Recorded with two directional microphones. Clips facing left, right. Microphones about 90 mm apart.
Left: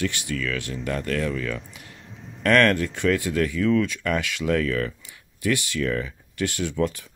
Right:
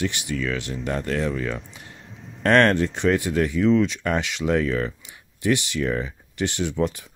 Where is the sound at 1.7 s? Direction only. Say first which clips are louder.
Right 1 dB; 25° right (ahead or behind).